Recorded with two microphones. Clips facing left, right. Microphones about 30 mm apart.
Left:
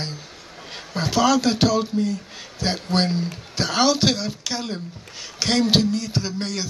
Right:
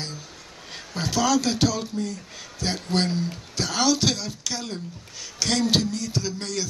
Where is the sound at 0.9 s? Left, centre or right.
Centre.